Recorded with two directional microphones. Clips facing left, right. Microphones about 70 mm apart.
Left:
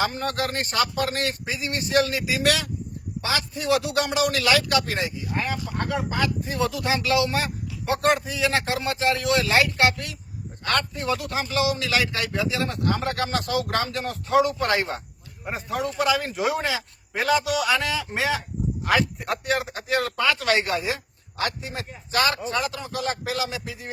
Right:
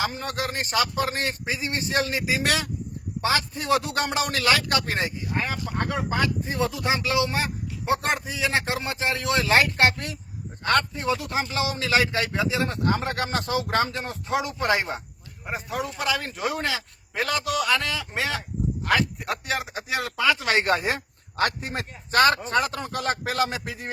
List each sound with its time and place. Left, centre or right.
0.0 s speech: centre
0.9 s a man's voice: right
3.2 s a man's voice: right
6.5 s a man's voice: right
15.4 s a man's voice: centre
20.4 s a man's voice: right
20.7 s speech: right